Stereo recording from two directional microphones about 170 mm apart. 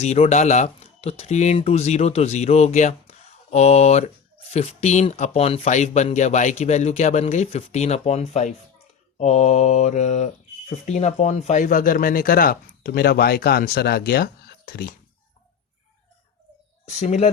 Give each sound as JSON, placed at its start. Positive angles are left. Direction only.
{"t": 0.0, "sound": "speech", "side_deg": 40}
{"t": 16.9, "sound": "speech", "side_deg": 45}